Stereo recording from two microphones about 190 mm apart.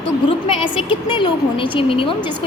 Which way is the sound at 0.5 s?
25° left (ahead or behind).